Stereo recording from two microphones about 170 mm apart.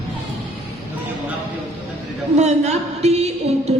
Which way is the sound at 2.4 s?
40° right (ahead or behind).